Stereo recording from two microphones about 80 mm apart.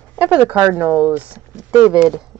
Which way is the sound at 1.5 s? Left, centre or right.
Centre.